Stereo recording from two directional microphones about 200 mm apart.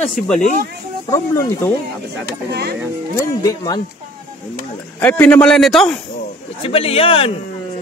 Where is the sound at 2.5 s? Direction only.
55° right (ahead or behind).